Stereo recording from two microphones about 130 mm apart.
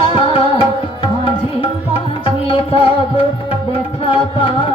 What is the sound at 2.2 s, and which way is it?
Music, 45° left (ahead or behind).